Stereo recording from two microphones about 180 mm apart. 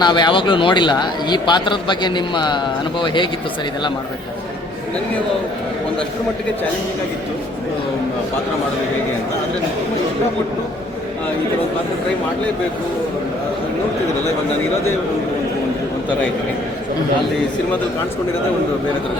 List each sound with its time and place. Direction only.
0.0 s a man's voice: 25° left (ahead or behind)